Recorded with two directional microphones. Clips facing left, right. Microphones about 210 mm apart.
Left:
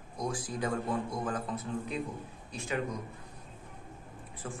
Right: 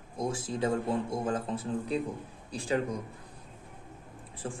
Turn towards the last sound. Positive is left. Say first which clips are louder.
# right 3 dB
turn(degrees=-35)  # may be behind; listen again after turning